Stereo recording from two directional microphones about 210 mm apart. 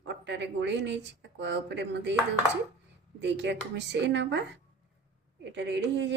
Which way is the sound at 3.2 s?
55° right (ahead or behind).